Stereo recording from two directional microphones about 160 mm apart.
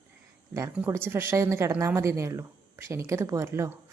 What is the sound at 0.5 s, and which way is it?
A woman's voice, 15° right (ahead or behind).